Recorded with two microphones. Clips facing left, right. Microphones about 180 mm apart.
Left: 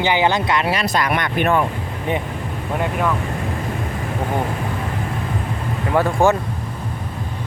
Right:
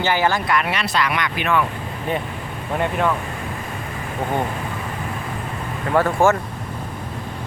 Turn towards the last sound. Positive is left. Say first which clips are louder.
# left 1 dB
turn(degrees=15)  # may be behind; listen again after turning